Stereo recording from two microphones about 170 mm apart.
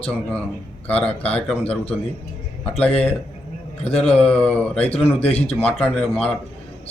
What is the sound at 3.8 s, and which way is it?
Speech, 35° left (ahead or behind).